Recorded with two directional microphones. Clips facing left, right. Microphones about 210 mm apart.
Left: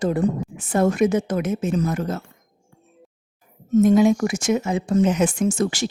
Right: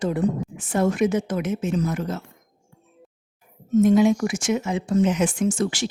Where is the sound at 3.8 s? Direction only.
45° left (ahead or behind).